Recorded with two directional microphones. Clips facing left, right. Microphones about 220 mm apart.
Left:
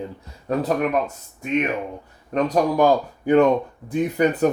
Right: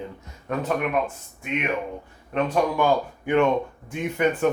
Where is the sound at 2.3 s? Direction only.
40° left (ahead or behind).